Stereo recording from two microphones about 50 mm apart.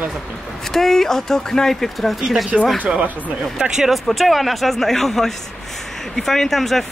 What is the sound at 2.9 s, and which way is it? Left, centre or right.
Speech, centre.